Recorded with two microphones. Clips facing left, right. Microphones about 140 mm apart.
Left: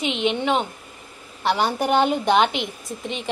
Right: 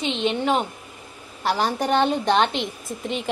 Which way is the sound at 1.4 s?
Centre (ahead or behind).